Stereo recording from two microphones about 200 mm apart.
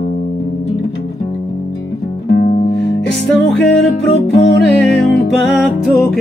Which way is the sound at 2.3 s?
55° left (ahead or behind).